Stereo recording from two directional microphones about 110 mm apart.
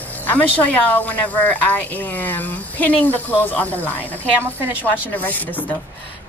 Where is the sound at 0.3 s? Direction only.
15° left (ahead or behind).